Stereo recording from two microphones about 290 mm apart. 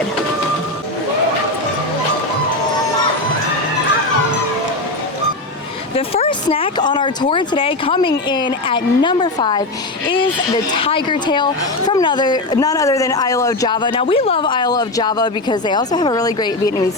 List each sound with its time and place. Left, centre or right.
6.0 s speech: centre
10.8 s a woman's voice: centre